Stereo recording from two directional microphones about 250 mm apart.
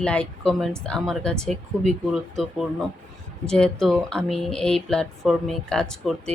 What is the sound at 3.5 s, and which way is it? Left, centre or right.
Speech, centre.